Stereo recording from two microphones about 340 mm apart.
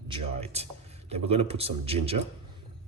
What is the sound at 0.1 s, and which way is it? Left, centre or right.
A man's voice, centre.